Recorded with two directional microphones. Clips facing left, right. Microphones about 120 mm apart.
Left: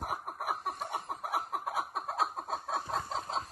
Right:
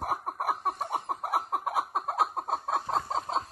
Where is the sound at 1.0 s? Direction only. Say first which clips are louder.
Right 5 dB; 70° right (ahead or behind).